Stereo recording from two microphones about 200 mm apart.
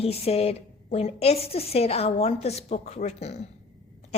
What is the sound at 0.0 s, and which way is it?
A woman's voice, 30° left (ahead or behind).